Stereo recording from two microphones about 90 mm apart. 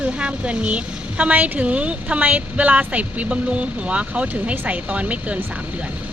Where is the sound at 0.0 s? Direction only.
15° right (ahead or behind).